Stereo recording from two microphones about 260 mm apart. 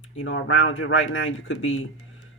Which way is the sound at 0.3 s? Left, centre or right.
Left.